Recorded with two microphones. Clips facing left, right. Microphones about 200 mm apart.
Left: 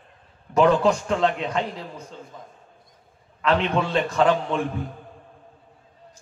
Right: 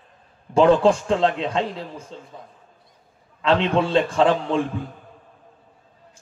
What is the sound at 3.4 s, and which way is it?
A man's voice, 30° right (ahead or behind).